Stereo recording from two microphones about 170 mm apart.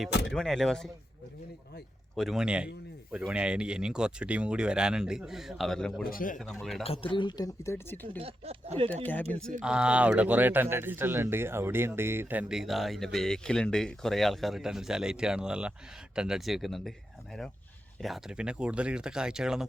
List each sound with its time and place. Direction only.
0.3 s speech: 5° left (ahead or behind)
2.1 s speech: centre (ahead or behind)
6.0 s speech: 60° left (ahead or behind)
6.5 s speech: centre (ahead or behind)
6.8 s speech: 35° left (ahead or behind); by 7.9 s 15° left (ahead or behind)
8.2 s speech: 35° right (ahead or behind)
9.6 s speech: 5° right (ahead or behind)
18.0 s speech: 5° right (ahead or behind)